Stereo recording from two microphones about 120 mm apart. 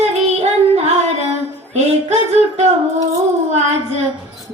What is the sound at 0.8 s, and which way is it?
Music, 60° right (ahead or behind).